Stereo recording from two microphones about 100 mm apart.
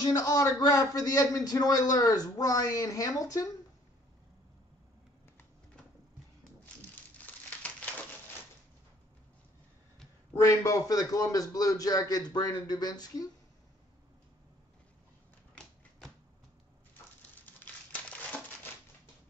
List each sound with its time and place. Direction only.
0.0 s a man's voice: 35° left (ahead or behind)
7.2 s a sound: 15° left (ahead or behind)
10.3 s a man's voice: 35° left (ahead or behind)